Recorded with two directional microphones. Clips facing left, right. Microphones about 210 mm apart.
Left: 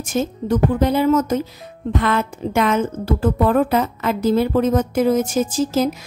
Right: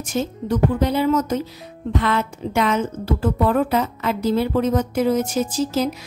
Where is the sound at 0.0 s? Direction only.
50° left (ahead or behind).